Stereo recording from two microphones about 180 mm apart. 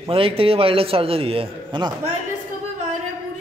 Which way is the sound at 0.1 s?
30° right (ahead or behind).